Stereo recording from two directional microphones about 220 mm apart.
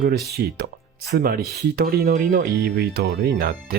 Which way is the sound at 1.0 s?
45° right (ahead or behind).